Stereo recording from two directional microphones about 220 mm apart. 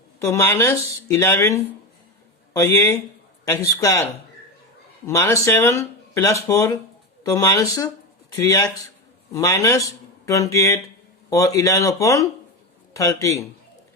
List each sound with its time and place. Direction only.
0.2 s a man's voice: 10° left (ahead or behind)
5.0 s speech: 15° left (ahead or behind)